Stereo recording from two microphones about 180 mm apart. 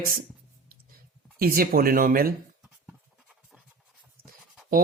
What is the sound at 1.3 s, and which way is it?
Speech, 55° right (ahead or behind).